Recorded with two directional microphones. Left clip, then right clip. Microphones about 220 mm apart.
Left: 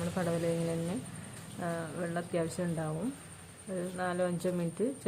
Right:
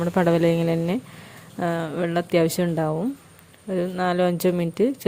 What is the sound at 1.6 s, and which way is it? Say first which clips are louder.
Speech: right 12 dB; 45° right (ahead or behind).